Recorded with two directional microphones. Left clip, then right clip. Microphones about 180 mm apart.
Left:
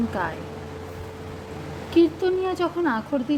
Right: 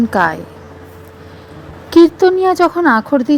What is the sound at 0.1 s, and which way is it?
Speech, 55° right (ahead or behind).